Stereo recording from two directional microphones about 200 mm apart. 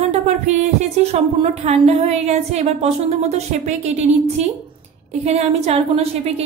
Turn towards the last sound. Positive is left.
turn(degrees=-30)  # may be behind; listen again after turning